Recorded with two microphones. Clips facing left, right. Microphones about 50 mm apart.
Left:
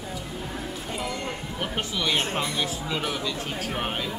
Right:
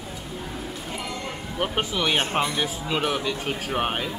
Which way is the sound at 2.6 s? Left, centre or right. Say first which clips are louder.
Right 3 dB; centre.